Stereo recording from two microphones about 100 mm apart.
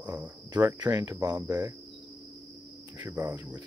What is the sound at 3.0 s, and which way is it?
Cricket, 25° right (ahead or behind).